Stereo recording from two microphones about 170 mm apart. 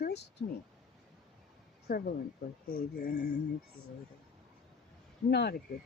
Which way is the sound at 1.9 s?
60° left (ahead or behind).